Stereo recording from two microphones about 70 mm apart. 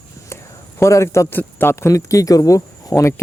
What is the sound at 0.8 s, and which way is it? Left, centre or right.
Speech, left.